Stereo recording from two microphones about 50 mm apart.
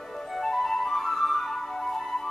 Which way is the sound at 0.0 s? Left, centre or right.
Centre.